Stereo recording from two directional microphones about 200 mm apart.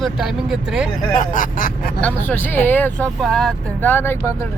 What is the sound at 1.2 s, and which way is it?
Speech, 40° left (ahead or behind).